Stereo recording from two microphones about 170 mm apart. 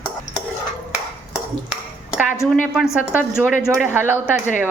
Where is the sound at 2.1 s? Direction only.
Centre (ahead or behind).